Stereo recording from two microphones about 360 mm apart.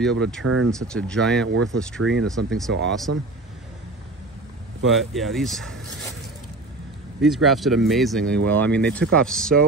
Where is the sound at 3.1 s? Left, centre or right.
Right.